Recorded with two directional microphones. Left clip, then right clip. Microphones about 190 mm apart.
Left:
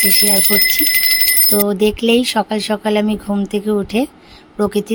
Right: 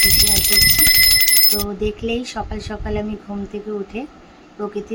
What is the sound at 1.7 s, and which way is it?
Speech, 55° left (ahead or behind).